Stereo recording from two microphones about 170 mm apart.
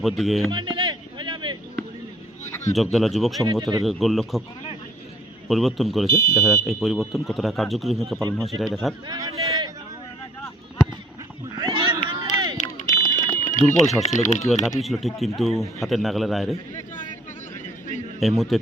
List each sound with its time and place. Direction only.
0.0 s speech: centre (ahead or behind)
0.5 s a sound: 30° right (ahead or behind)
2.7 s speech: centre (ahead or behind)
3.4 s speech: 25° right (ahead or behind)
3.8 s speech: centre (ahead or behind)
5.5 s speech: centre (ahead or behind)
9.0 s a man's voice: 20° right (ahead or behind)
11.5 s cat: 25° right (ahead or behind)
12.0 s a sound: 25° right (ahead or behind)
12.5 s run: 45° left (ahead or behind)
14.0 s speech: 45° left (ahead or behind)
14.8 s speech: centre (ahead or behind)
18.2 s speech: centre (ahead or behind)